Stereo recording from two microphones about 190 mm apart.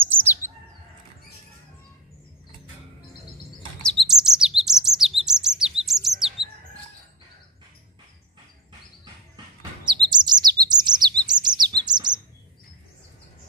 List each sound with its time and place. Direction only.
0.0 s chirp: 10° right (ahead or behind)
4.1 s chirp: 5° right (ahead or behind)
9.8 s bird: 25° right (ahead or behind)
11.2 s chirp: 25° right (ahead or behind)